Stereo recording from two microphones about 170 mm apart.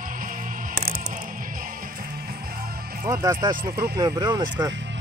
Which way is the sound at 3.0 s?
20° right (ahead or behind).